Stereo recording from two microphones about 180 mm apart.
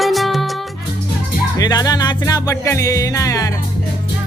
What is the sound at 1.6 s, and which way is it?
Music, 20° left (ahead or behind).